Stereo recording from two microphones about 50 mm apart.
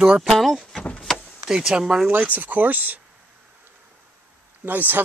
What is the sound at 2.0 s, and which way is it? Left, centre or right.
Speech, right.